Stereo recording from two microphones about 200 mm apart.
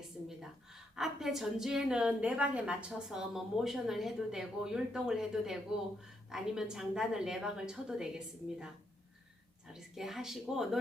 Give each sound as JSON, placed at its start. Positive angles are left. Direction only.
{"t": 0.3, "sound": "a woman's voice", "side_deg": 0}
{"t": 9.7, "sound": "a woman's voice", "side_deg": 0}